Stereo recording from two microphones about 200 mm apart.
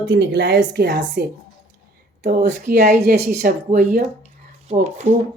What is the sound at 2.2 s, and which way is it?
Speech, 45° right (ahead or behind).